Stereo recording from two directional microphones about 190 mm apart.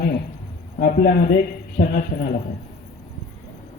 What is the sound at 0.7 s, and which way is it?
Speech, 50° left (ahead or behind).